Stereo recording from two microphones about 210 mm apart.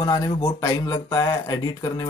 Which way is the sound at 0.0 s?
15° left (ahead or behind).